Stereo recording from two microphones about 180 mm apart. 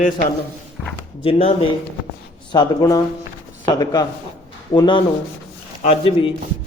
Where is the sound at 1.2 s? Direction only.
30° left (ahead or behind).